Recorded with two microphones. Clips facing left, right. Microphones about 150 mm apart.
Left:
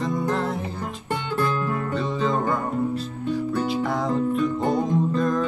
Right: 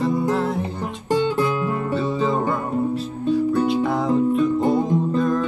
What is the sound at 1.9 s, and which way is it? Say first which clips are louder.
Music: right 3 dB; 5° right (ahead or behind).